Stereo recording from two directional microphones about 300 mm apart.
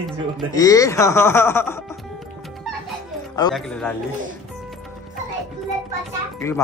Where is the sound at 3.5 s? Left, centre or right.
Centre.